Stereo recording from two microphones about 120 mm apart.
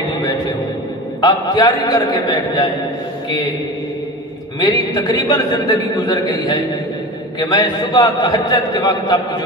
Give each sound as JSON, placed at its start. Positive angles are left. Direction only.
{"t": 1.2, "sound": "a man's voice", "side_deg": 30}
{"t": 4.6, "sound": "a man's voice", "side_deg": 30}